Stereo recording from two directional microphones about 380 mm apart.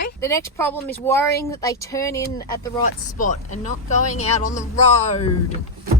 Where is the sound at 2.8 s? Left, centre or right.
Centre.